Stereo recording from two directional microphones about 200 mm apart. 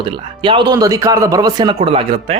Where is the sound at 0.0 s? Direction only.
25° right (ahead or behind).